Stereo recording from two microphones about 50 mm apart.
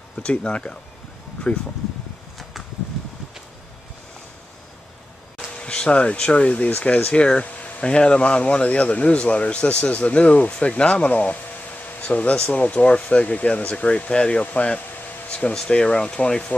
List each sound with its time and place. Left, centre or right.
0.2 s speech: left
5.5 s speech: centre
14.8 s air conditioning: left
15.5 s speech: centre